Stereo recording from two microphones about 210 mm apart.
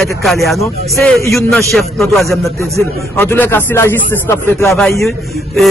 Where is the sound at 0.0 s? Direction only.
Centre (ahead or behind).